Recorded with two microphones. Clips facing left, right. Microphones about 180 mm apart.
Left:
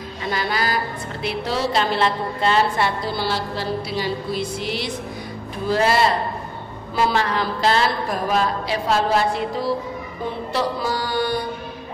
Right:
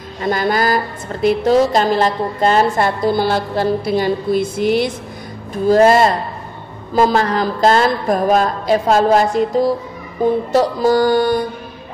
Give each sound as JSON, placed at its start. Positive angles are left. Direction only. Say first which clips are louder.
{"t": 0.2, "sound": "a woman's voice", "louder": "right 8 dB", "side_deg": -50}